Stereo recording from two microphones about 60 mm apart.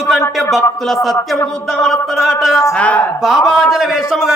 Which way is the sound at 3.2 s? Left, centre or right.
Centre.